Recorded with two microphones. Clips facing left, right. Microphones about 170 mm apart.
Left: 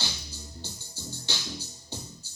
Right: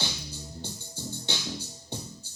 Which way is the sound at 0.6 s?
55° right (ahead or behind).